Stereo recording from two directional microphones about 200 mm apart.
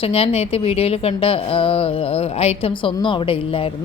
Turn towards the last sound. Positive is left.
turn(degrees=25)  # may be behind; listen again after turning